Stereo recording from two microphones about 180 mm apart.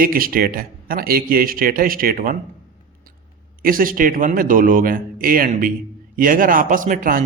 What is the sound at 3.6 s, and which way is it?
A man's voice, 50° right (ahead or behind).